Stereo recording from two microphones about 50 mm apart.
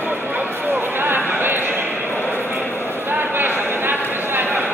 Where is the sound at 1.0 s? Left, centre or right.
Right.